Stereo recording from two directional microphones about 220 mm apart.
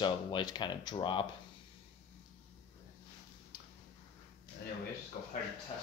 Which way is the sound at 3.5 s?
40° left (ahead or behind).